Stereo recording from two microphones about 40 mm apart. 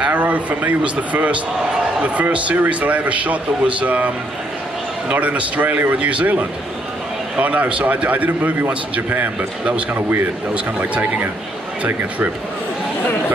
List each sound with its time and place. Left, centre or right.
0.0 s a man's voice: right
5.1 s a man's voice: right
9.9 s speech: right
10.8 s a man's voice: right